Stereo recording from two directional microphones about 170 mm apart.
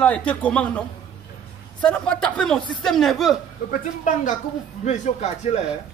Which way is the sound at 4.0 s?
50° left (ahead or behind).